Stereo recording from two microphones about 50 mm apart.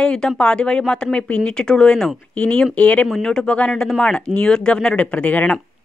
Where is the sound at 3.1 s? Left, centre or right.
Centre.